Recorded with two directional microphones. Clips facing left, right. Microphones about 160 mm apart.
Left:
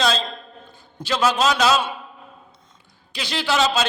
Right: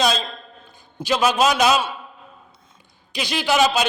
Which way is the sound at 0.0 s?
15° right (ahead or behind).